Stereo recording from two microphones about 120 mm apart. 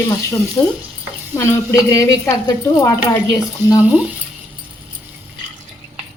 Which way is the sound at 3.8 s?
10° right (ahead or behind).